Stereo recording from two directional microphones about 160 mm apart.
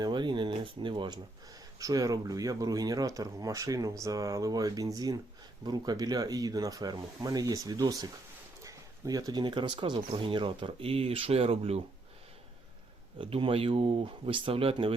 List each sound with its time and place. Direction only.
0.0 s a sound: 30° right (ahead or behind)
1.8 s speech: 20° right (ahead or behind); by 11.8 s 40° right (ahead or behind)
13.1 s speech: 35° right (ahead or behind)